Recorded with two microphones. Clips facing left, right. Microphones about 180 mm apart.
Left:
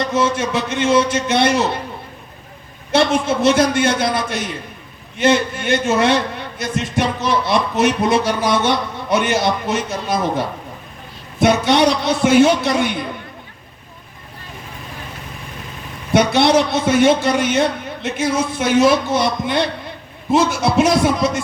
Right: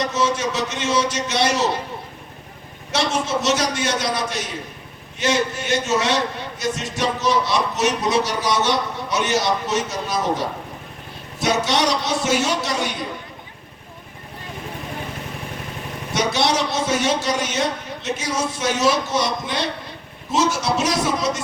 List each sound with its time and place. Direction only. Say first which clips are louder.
0.0 s a man's voice: left 3 dB; 55° left (ahead or behind)
2.9 s a man's voice: left 6 dB; 55° left (ahead or behind)
16.1 s a man's voice: left 7 dB; 55° left (ahead or behind)